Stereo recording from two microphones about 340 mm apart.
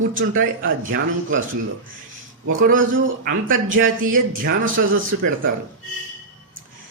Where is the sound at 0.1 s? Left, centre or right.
Right.